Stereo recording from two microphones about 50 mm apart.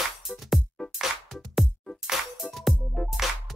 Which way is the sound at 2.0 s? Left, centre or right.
Centre.